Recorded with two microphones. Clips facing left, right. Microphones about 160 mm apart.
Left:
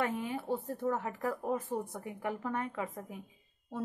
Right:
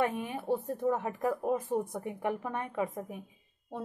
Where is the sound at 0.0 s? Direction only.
15° right (ahead or behind).